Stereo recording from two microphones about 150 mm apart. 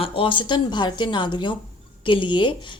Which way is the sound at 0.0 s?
35° left (ahead or behind).